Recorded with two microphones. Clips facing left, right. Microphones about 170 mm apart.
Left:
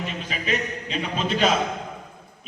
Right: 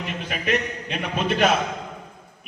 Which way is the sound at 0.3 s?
60° right (ahead or behind).